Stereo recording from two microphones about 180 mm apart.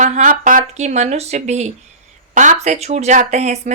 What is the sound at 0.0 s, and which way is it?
Speech, 45° right (ahead or behind).